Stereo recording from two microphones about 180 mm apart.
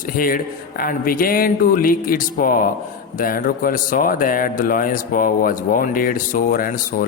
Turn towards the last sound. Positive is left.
turn(degrees=55)  # may be behind; listen again after turning